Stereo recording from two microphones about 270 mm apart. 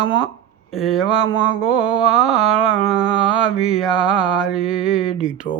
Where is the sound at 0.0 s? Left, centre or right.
Centre.